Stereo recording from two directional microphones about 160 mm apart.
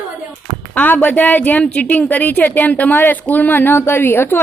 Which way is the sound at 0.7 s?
10° left (ahead or behind).